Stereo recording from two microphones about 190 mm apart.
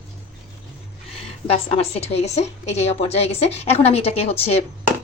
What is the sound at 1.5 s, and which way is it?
A woman's voice, 30° left (ahead or behind).